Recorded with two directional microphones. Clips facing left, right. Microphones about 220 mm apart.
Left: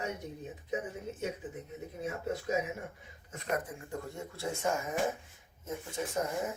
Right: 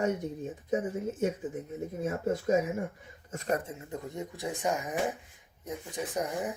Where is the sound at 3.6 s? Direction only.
25° right (ahead or behind).